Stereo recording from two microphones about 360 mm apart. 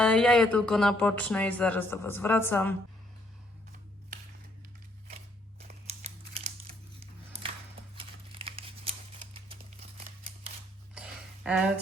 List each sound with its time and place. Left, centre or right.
0.0 s speech: centre
5.1 s scissors: centre
7.9 s crumpling: centre
10.9 s a sound: centre